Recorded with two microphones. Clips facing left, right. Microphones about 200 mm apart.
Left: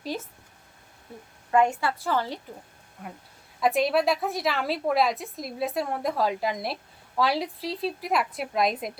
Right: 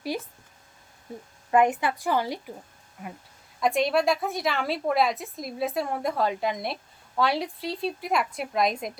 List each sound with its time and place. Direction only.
0.1 s a woman's voice: 10° right (ahead or behind)
1.5 s a woman's voice: 20° right (ahead or behind); by 8.9 s centre (ahead or behind)